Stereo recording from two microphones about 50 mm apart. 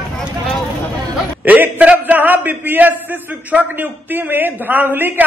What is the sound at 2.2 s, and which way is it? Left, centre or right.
Speech, right.